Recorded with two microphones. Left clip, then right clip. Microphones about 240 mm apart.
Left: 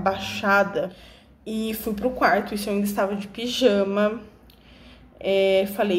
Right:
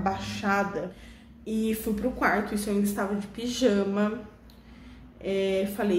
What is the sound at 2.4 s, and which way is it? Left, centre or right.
Speech, right.